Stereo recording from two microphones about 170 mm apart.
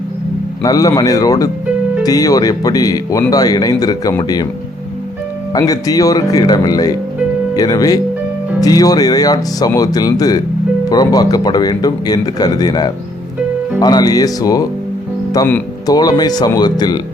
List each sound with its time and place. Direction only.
0.6 s speech: 20° left (ahead or behind)
5.5 s speech: 20° left (ahead or behind)